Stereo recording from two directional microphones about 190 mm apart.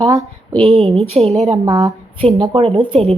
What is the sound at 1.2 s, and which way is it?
Speech, 30° right (ahead or behind).